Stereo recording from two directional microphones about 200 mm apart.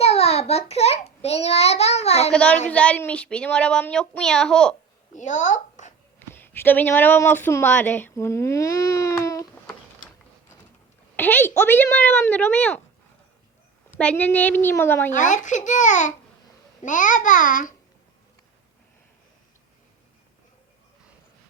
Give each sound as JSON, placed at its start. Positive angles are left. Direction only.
{"t": 0.0, "sound": "a child's voice", "side_deg": 30}
{"t": 2.3, "sound": "speech", "side_deg": 5}
{"t": 5.1, "sound": "a child's voice", "side_deg": 40}
{"t": 6.1, "sound": "speech", "side_deg": 10}
{"t": 11.2, "sound": "speech", "side_deg": 10}
{"t": 13.9, "sound": "speech", "side_deg": 5}
{"t": 15.1, "sound": "a child's voice", "side_deg": 40}